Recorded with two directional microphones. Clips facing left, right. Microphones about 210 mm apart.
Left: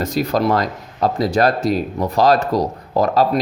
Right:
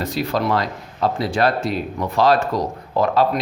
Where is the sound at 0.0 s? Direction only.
45° left (ahead or behind).